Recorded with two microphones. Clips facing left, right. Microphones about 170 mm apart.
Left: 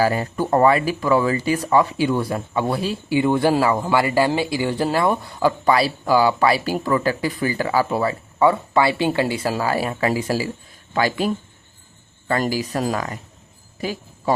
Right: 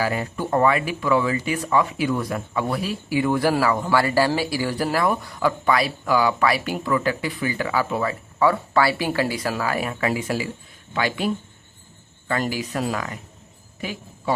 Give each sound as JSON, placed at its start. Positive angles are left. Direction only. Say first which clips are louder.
{"t": 0.0, "sound": "speech", "louder": "left 4 dB", "side_deg": 40}
{"t": 12.3, "sound": "speech", "louder": "left 3 dB", "side_deg": 35}